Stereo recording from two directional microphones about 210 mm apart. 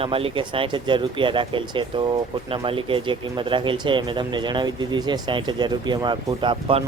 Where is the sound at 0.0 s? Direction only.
25° right (ahead or behind).